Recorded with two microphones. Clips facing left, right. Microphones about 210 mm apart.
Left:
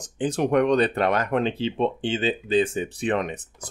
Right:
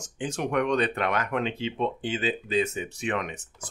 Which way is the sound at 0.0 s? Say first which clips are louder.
Left 6 dB; 35° left (ahead or behind).